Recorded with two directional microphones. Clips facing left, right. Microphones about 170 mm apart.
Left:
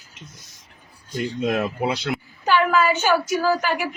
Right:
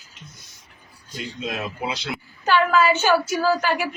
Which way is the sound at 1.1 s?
45° left (ahead or behind).